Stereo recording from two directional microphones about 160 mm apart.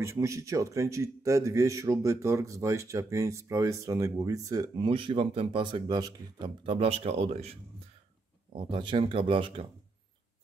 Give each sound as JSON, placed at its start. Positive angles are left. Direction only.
{"t": 0.0, "sound": "a man's voice", "side_deg": -20}
{"t": 4.7, "sound": "speech", "side_deg": -30}
{"t": 8.5, "sound": "speech", "side_deg": -35}